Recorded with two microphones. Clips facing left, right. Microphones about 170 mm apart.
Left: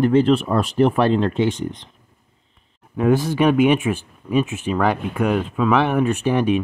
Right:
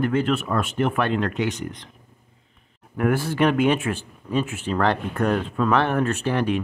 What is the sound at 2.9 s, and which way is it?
Speech, 15° left (ahead or behind).